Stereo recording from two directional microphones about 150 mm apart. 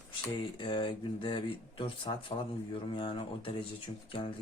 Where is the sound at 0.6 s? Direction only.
35° left (ahead or behind).